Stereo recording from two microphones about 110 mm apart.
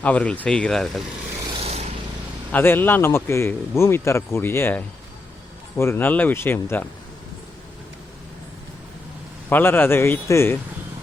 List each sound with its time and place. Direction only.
0.0 s speech: 10° left (ahead or behind)
1.5 s vehicle: 75° right (ahead or behind)
2.5 s a man's voice: 20° left (ahead or behind)
9.5 s a man's voice: 20° left (ahead or behind)